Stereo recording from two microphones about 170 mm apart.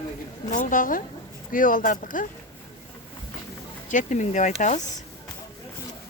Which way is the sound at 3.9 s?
45° left (ahead or behind).